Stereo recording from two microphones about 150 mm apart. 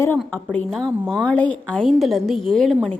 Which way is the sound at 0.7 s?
Centre (ahead or behind).